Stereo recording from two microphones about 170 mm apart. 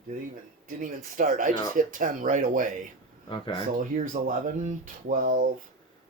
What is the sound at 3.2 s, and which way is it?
Speech, 30° left (ahead or behind).